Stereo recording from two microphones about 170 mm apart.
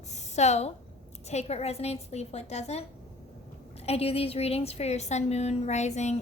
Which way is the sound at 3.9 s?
35° left (ahead or behind).